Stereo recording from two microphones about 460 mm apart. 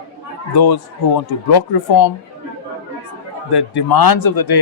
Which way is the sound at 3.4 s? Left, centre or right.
Left.